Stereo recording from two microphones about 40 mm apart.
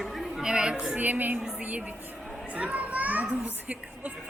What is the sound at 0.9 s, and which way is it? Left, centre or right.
A woman's voice, right.